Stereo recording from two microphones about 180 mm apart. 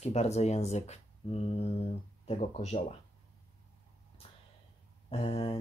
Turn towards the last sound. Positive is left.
turn(degrees=30)  # may be behind; listen again after turning